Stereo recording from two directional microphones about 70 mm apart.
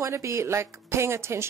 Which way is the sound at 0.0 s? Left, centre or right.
Right.